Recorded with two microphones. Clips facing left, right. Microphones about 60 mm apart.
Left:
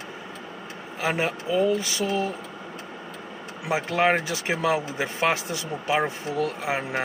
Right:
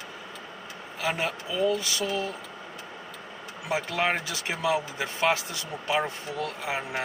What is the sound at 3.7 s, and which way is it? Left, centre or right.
Speech, left.